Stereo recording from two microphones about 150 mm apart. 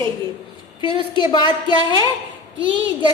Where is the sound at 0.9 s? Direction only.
35° left (ahead or behind).